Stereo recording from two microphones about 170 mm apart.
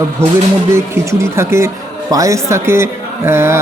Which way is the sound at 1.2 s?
15° right (ahead or behind).